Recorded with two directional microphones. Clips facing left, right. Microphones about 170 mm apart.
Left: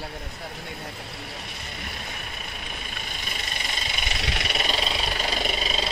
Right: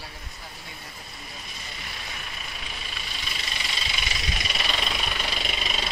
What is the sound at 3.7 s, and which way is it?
Vehicle, 60° left (ahead or behind).